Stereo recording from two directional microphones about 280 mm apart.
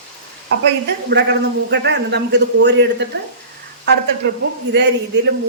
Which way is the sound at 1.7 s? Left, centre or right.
Right.